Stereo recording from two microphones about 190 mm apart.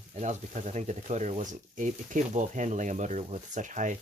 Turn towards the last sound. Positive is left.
turn(degrees=-40)  # may be behind; listen again after turning